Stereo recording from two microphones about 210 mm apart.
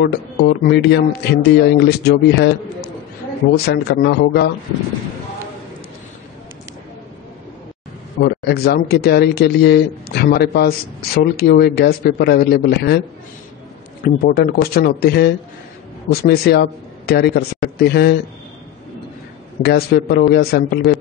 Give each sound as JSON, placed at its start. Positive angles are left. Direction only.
{"t": 0.0, "sound": "speech", "side_deg": 50}
{"t": 8.2, "sound": "speech", "side_deg": 50}
{"t": 14.0, "sound": "speech", "side_deg": 45}
{"t": 19.6, "sound": "speech", "side_deg": 50}